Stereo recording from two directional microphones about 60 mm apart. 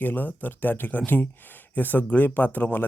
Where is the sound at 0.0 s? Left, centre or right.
Left.